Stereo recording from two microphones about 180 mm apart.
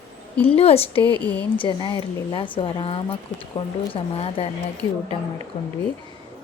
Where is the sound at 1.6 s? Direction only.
30° left (ahead or behind).